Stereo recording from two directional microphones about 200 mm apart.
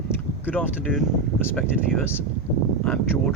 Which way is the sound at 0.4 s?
10° left (ahead or behind).